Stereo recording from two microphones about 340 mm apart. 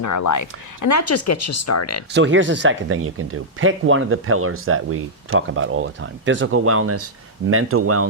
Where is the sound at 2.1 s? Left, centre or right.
Right.